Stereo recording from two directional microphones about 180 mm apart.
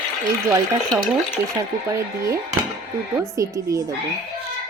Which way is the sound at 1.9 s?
15° right (ahead or behind).